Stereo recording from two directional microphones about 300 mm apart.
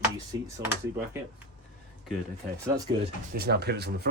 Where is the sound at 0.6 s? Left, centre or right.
Centre.